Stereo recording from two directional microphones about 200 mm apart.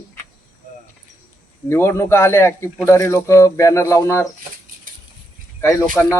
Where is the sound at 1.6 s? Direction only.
15° left (ahead or behind).